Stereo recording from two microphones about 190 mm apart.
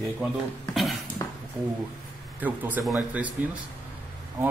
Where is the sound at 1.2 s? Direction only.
15° left (ahead or behind).